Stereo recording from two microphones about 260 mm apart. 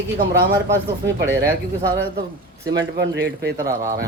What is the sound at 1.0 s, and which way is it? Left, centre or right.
Speech, right.